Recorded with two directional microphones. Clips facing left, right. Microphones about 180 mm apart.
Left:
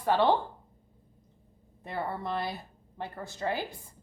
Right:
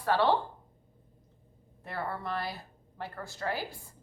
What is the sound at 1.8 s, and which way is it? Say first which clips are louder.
Speech: left 2 dB; 20° left (ahead or behind).